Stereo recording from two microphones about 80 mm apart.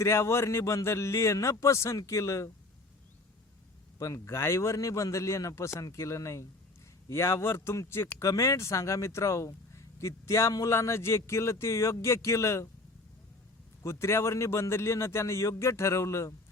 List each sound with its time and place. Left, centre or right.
0.0 s a man's voice: left
3.9 s a man's voice: left
13.8 s a man's voice: left